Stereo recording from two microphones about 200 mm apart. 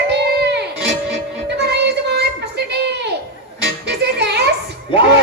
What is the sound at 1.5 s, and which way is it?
Music, 55° right (ahead or behind).